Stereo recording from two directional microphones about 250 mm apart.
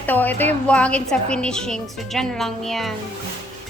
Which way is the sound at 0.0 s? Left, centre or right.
Centre.